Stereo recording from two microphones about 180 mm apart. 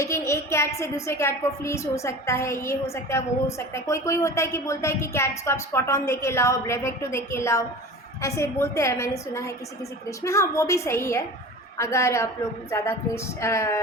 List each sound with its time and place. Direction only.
0.0 s a woman's voice: 15° left (ahead or behind)